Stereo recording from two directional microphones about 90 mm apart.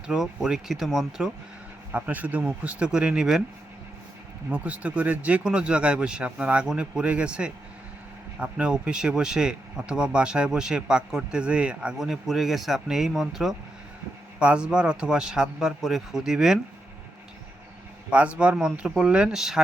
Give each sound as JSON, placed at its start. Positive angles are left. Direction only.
{"t": 0.1, "sound": "speech", "side_deg": -5}
{"t": 1.9, "sound": "speech", "side_deg": -20}
{"t": 4.4, "sound": "speech", "side_deg": -15}
{"t": 18.1, "sound": "speech", "side_deg": -15}